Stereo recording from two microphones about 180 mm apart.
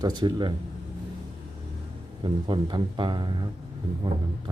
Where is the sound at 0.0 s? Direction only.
25° right (ahead or behind).